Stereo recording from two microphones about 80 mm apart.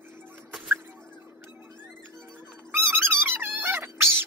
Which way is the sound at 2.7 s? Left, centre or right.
Right.